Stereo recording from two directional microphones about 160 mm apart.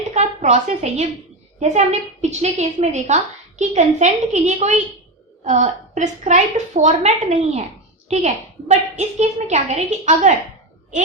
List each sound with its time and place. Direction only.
0.1 s a woman's voice: 45° right (ahead or behind)